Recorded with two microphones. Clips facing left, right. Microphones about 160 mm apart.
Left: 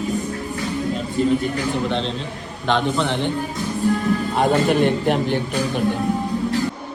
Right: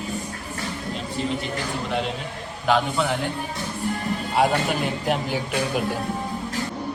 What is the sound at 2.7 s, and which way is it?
Speech, 5° right (ahead or behind).